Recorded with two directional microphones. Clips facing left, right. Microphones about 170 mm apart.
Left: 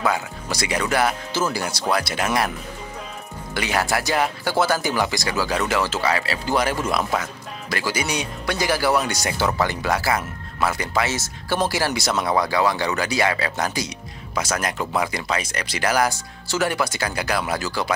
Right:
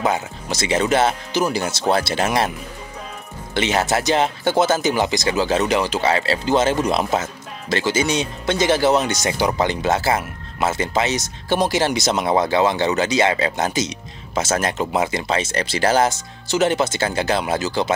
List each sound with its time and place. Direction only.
0.0 s speech: 20° right (ahead or behind)
3.5 s speech: 20° right (ahead or behind)